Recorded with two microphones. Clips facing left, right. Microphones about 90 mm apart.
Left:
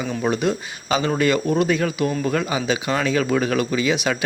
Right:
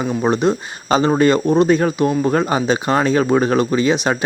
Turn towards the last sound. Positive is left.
turn(degrees=-35)  # may be behind; listen again after turning